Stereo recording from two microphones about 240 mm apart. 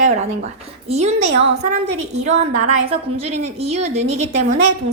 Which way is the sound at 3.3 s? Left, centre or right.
Right.